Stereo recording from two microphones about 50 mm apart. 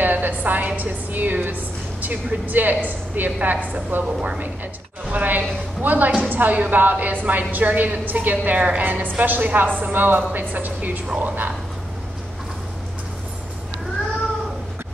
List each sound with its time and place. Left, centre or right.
0.0 s a woman's voice: right
3.9 s a woman's voice: right
5.1 s a woman's voice: right